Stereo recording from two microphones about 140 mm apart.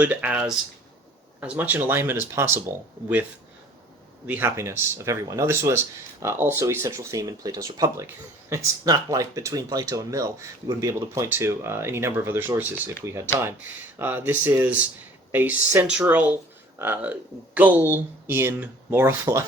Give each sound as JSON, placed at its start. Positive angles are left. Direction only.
{"t": 0.0, "sound": "speech", "side_deg": -10}
{"t": 4.3, "sound": "speech", "side_deg": -15}